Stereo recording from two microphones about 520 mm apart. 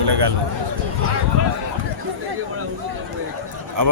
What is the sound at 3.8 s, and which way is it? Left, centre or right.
Speech, right.